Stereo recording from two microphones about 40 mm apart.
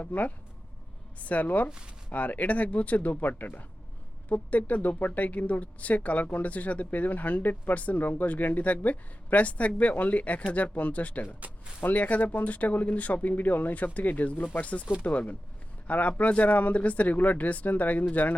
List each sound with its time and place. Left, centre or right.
0.0 s speech: left
1.5 s speech: left
3.2 s speech: left
4.3 s speech: left